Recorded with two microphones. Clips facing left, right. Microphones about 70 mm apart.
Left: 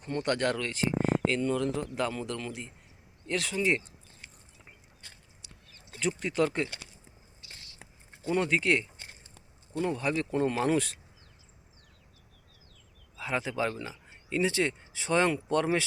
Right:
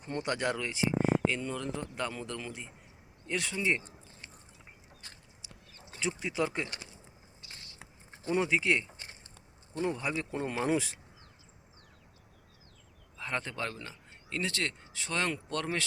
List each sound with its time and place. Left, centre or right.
0.2 s speech: centre
5.4 s a sound: centre
6.0 s speech: centre
7.4 s a sound: right
8.3 s speech: centre
13.1 s speech: centre